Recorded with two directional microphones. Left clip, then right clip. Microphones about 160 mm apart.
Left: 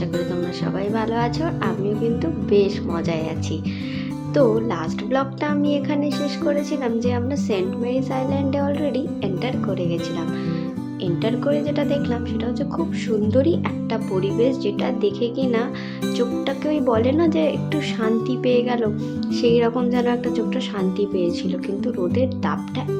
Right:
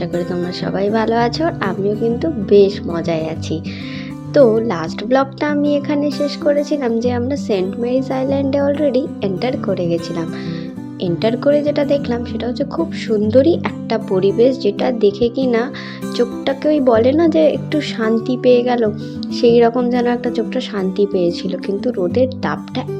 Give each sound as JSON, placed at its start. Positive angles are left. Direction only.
{"t": 0.6, "sound": "speech", "side_deg": -35}